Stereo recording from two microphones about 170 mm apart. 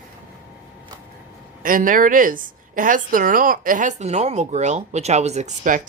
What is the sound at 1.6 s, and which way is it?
A woman's voice, 55° right (ahead or behind).